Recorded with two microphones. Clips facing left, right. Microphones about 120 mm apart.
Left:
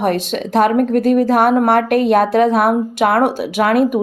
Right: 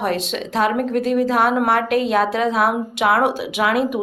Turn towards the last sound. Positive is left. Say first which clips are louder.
# left 5 dB
turn(degrees=50)  # may be behind; listen again after turning